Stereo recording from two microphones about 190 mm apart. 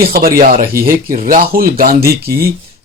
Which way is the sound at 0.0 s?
50° right (ahead or behind).